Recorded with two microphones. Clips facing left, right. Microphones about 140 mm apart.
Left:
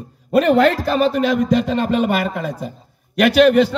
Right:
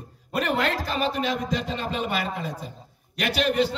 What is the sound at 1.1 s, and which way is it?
A man's voice, 60° left (ahead or behind).